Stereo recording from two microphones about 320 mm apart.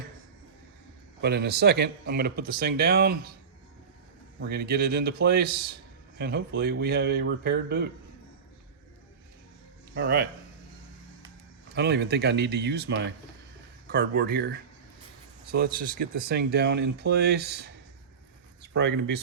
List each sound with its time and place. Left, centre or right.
1.2 s speech: right
4.4 s a man's voice: right
9.9 s a man's voice: right
11.7 s a man's voice: right